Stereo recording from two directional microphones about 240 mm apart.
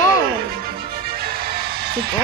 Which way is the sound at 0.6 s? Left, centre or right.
Right.